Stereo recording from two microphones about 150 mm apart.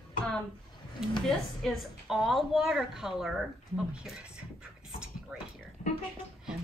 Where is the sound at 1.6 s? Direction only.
Centre (ahead or behind).